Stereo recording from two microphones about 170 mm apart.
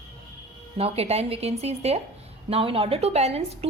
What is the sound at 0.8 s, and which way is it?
A woman's voice, 35° right (ahead or behind).